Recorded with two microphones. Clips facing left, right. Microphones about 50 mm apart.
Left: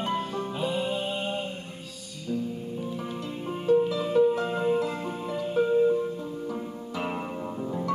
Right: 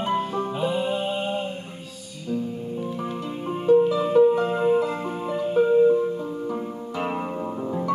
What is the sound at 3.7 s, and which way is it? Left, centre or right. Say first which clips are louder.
Music: right 5 dB; centre.